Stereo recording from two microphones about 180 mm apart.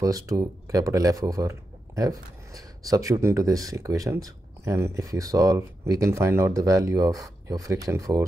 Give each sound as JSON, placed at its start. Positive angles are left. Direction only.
{"t": 0.0, "sound": "speech", "side_deg": -20}